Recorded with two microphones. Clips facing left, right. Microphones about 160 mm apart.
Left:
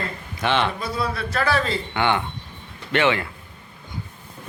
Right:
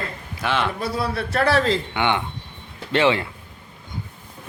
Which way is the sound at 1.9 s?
15° right (ahead or behind).